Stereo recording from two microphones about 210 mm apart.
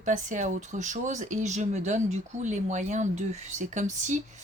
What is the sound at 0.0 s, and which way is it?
Speech, 35° right (ahead or behind).